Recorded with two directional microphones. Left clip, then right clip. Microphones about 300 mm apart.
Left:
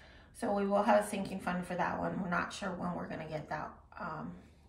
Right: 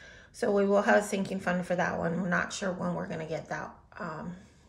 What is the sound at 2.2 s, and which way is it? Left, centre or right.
Speech, right.